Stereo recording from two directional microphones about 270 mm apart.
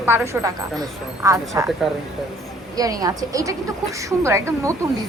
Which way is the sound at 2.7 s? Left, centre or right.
Centre.